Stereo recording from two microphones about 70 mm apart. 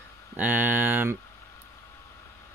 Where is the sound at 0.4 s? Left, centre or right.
Right.